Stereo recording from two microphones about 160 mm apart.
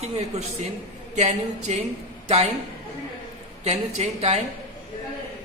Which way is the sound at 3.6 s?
40° right (ahead or behind).